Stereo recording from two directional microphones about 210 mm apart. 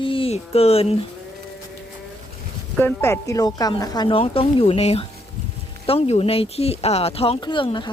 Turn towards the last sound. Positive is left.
turn(degrees=20)  # may be behind; listen again after turning